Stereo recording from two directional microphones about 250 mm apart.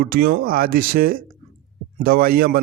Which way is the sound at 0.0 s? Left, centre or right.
Right.